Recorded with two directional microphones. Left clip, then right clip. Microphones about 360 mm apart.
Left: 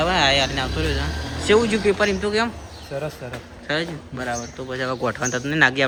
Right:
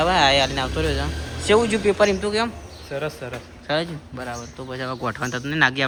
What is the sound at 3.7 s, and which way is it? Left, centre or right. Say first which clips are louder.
A man's voice: right 1 dB; centre.